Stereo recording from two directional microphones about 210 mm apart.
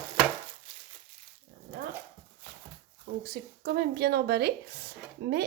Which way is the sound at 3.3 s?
50° right (ahead or behind).